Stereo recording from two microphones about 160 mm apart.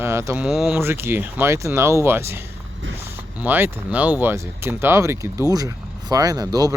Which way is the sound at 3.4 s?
10° right (ahead or behind).